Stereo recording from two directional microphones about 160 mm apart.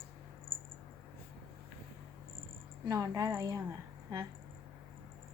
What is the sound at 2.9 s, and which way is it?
Speech, 20° right (ahead or behind).